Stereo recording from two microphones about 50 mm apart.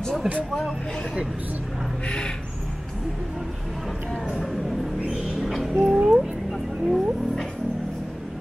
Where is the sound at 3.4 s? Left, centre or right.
Centre.